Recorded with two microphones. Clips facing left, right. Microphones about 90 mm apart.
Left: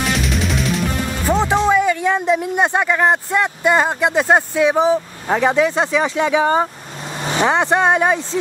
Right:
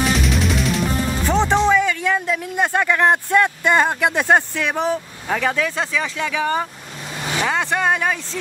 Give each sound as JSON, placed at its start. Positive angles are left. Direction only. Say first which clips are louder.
{"t": 0.1, "sound": "music", "louder": "even", "side_deg": 0}
{"t": 1.7, "sound": "speech", "louder": "left 2 dB", "side_deg": 15}